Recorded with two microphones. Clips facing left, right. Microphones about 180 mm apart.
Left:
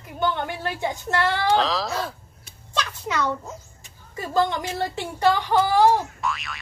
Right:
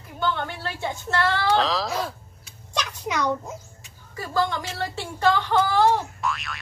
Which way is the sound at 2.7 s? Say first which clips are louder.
Left 1 dB; 15° right (ahead or behind).